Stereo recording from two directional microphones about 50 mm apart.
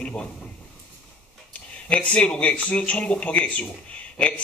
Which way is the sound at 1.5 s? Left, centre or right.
Left.